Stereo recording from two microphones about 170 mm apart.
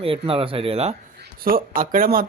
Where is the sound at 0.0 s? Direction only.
35° right (ahead or behind).